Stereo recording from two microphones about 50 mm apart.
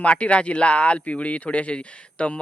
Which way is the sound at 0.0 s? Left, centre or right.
Left.